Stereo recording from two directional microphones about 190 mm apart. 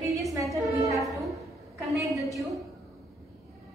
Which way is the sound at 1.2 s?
Centre (ahead or behind).